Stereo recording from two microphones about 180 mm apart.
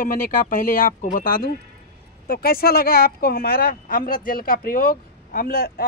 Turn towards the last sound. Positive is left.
turn(degrees=60)  # may be behind; listen again after turning